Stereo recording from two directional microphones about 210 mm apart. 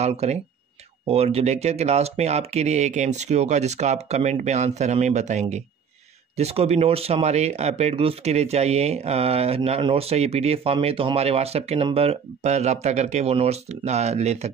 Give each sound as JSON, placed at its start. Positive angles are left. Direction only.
{"t": 0.0, "sound": "speech", "side_deg": -30}